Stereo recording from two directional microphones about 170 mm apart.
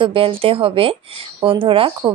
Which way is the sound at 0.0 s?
30° right (ahead or behind).